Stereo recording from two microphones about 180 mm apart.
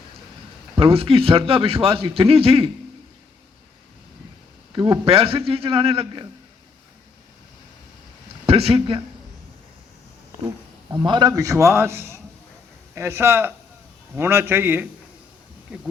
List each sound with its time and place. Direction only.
0.8 s a man's voice: 30° right (ahead or behind)
4.7 s a man's voice: 30° right (ahead or behind)
8.4 s a man's voice: 35° right (ahead or behind)
11.0 s a man's voice: 25° right (ahead or behind); by 15.9 s centre (ahead or behind)